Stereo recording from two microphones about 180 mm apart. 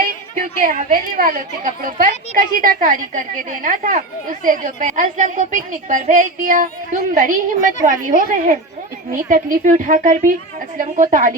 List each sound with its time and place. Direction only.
0.0 s a woman's voice: 50° right (ahead or behind)
9.3 s a woman's voice: 45° right (ahead or behind)